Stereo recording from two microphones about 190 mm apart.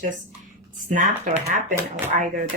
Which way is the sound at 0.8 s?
40° right (ahead or behind).